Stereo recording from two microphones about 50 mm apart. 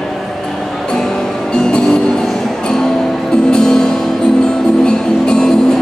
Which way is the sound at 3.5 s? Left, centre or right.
Centre.